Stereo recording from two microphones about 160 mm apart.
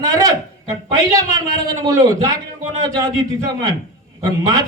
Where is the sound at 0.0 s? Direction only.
20° right (ahead or behind).